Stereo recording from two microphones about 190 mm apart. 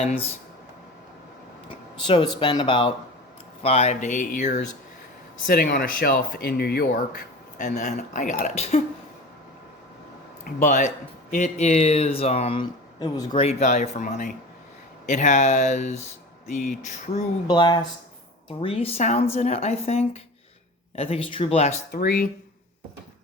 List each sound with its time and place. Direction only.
0.0 s speech: 35° left (ahead or behind)
2.0 s speech: 25° left (ahead or behind); by 6.8 s 55° left (ahead or behind)
7.8 s speech: 40° left (ahead or behind)
10.4 s speech: 40° left (ahead or behind); by 13.4 s 20° left (ahead or behind)
13.4 s speech: 35° left (ahead or behind)
17.5 s speech: 25° left (ahead or behind)